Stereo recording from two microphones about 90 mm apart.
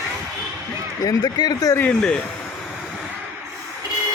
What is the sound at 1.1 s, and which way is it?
Speech, 45° left (ahead or behind).